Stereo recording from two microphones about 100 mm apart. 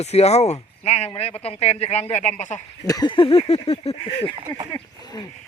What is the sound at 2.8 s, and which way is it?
Speech, 35° left (ahead or behind).